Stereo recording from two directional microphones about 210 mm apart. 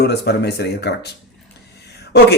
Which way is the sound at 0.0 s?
50° left (ahead or behind).